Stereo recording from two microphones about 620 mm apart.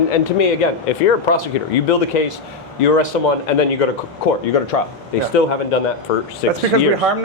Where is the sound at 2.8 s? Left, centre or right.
Left.